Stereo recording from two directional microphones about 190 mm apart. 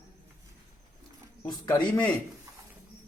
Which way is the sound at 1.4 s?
20° left (ahead or behind).